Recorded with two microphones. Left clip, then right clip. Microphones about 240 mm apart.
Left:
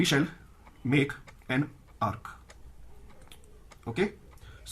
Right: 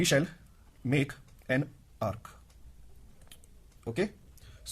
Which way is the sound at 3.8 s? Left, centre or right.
Right.